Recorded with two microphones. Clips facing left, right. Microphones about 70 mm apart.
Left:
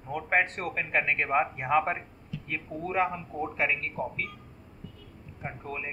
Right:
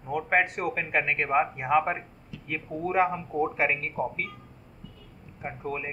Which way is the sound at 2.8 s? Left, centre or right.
Centre.